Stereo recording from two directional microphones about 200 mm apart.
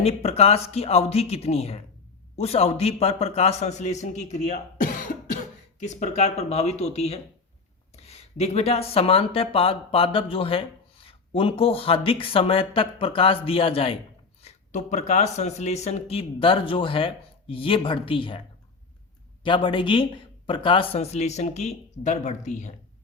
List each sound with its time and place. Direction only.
0.0 s a man's voice: 30° left (ahead or behind)